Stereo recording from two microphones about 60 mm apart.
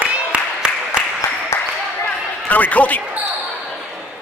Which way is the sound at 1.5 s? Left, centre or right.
Left.